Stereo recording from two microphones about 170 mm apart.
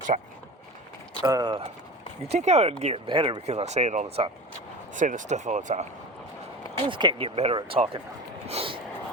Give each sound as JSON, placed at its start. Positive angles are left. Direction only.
{"t": 0.1, "sound": "speech", "side_deg": -40}
{"t": 1.2, "sound": "speech", "side_deg": -25}
{"t": 2.2, "sound": "speech", "side_deg": -40}
{"t": 6.7, "sound": "speech", "side_deg": -30}
{"t": 8.4, "sound": "a sound", "side_deg": -35}